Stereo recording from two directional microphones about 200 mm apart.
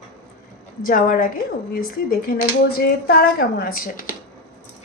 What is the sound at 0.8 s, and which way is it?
Speech, 45° left (ahead or behind).